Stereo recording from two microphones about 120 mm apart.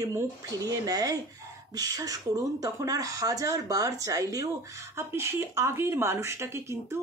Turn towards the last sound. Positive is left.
turn(degrees=-20)  # may be behind; listen again after turning